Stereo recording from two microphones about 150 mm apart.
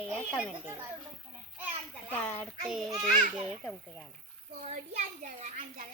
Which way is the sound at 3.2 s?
45° right (ahead or behind).